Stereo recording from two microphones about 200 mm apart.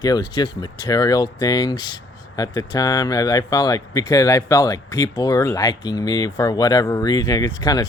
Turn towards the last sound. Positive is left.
turn(degrees=20)  # may be behind; listen again after turning